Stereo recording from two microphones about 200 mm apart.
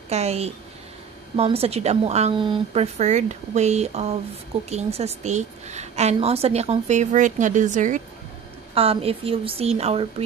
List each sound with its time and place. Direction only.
0.1 s a woman's voice: 30° right (ahead or behind)